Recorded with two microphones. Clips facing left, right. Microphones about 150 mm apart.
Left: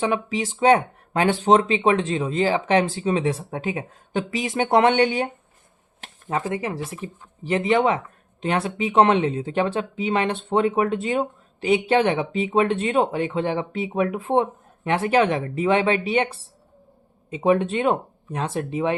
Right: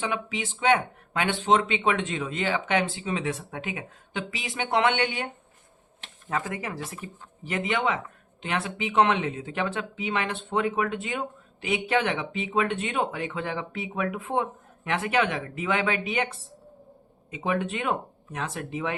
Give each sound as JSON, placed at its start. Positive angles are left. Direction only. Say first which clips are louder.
{"t": 0.0, "sound": "speech", "louder": "left 7 dB", "side_deg": 40}
{"t": 6.2, "sound": "speech", "louder": "left 5 dB", "side_deg": 25}